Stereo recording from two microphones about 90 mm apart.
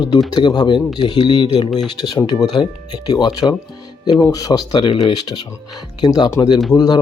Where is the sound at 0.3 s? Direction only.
55° left (ahead or behind).